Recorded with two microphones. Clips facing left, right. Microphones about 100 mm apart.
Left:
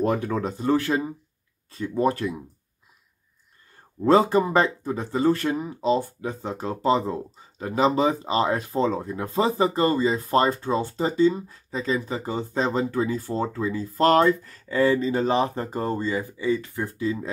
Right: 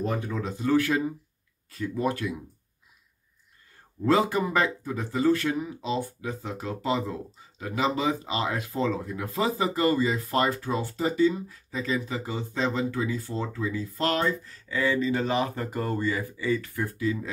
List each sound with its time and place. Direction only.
0.0 s speech: 60° left (ahead or behind)
0.4 s speech: 35° left (ahead or behind)
4.0 s speech: 35° left (ahead or behind)